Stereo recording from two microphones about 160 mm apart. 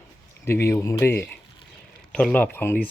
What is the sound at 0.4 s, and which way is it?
Speech, 15° left (ahead or behind).